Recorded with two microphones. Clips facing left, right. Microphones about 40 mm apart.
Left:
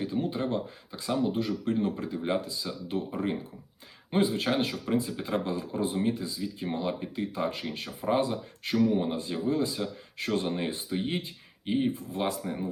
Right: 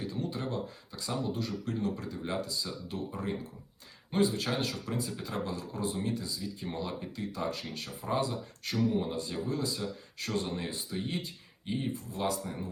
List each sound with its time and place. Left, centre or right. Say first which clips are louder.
0.0 s speech: left 6 dB; left